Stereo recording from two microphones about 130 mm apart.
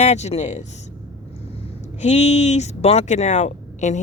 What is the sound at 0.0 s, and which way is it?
Speech, 60° left (ahead or behind).